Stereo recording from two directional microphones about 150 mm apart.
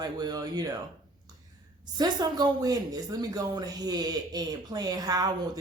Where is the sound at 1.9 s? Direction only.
25° right (ahead or behind).